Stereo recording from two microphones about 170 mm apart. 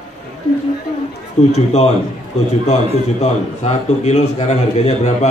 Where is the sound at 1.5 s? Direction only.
40° left (ahead or behind).